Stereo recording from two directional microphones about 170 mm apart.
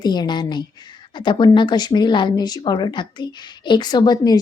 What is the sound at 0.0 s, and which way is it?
Speech, 25° left (ahead or behind).